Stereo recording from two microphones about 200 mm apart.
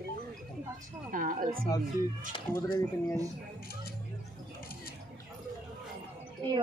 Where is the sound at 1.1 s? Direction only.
45° right (ahead or behind).